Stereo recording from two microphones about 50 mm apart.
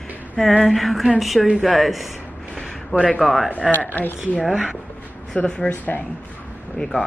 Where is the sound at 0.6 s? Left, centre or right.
Centre.